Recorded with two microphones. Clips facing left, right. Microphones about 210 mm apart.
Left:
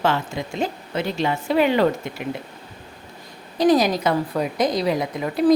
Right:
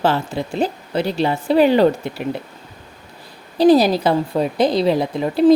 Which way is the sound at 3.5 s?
30° right (ahead or behind).